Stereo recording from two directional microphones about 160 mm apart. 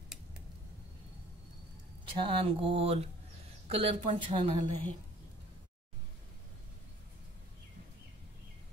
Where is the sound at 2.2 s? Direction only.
35° right (ahead or behind).